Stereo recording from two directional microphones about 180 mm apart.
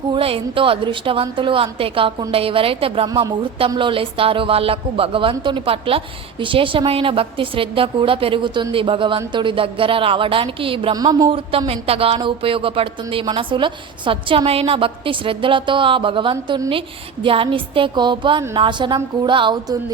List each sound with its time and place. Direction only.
0.1 s a woman's voice: 30° right (ahead or behind)